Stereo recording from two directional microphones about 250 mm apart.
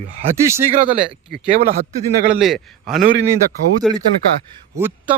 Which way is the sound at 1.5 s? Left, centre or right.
Right.